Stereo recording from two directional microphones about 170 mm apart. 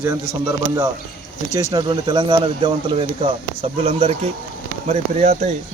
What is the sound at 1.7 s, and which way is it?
Speech, 25° right (ahead or behind).